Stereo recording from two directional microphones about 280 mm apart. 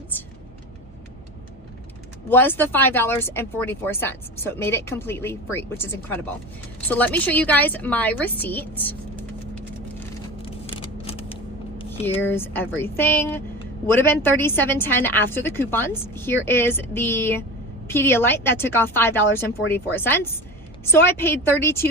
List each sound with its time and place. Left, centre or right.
2.3 s a woman's voice: centre
10.4 s a sound: centre
11.9 s speech: centre